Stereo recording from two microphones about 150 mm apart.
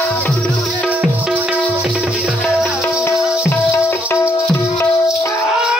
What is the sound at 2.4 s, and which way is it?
Music, 20° left (ahead or behind).